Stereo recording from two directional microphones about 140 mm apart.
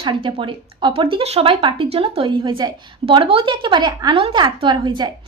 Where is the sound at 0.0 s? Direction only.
40° right (ahead or behind).